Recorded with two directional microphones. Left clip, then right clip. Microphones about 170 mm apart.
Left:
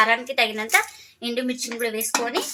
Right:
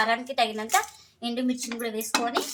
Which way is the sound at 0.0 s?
30° left (ahead or behind).